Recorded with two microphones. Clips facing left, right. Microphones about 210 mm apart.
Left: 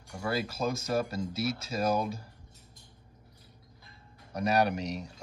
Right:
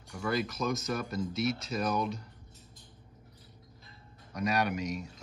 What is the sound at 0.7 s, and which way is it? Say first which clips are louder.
Speech: left 3 dB; 30° left (ahead or behind).